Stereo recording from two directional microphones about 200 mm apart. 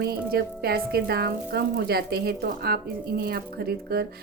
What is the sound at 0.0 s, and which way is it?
A woman's voice, 50° right (ahead or behind).